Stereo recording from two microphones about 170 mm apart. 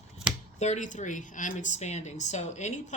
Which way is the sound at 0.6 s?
45° left (ahead or behind).